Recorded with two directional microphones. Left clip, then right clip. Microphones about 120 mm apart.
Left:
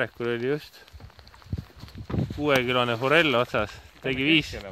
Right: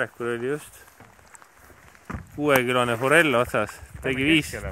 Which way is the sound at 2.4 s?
10° right (ahead or behind).